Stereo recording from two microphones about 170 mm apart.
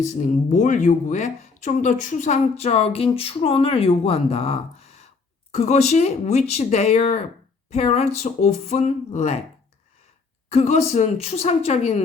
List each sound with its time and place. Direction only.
0.0 s speech: 45° left (ahead or behind)
10.5 s speech: 40° left (ahead or behind)